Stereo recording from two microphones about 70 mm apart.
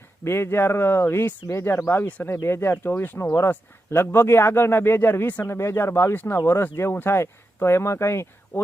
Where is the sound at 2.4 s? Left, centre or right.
Left.